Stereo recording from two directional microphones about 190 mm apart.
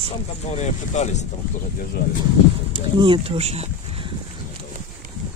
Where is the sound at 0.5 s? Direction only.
35° left (ahead or behind).